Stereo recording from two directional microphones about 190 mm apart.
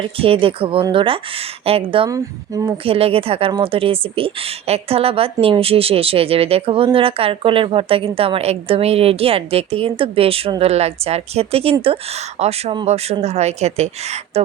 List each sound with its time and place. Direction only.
0.0 s speech: 30° right (ahead or behind)
2.0 s speech: 15° right (ahead or behind)
2.8 s speech: 30° right (ahead or behind)